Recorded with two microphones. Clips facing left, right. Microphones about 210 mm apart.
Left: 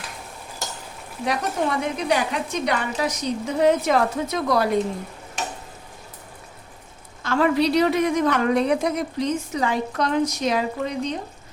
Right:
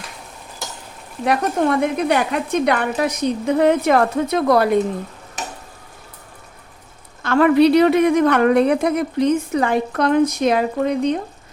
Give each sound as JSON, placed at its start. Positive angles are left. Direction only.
{"t": 1.2, "sound": "a woman's voice", "side_deg": -55}
{"t": 7.2, "sound": "a woman's voice", "side_deg": -60}